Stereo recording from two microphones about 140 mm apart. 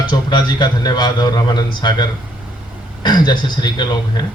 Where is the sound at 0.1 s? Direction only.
30° left (ahead or behind).